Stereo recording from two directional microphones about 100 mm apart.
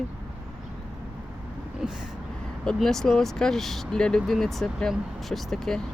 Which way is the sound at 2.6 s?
5° left (ahead or behind).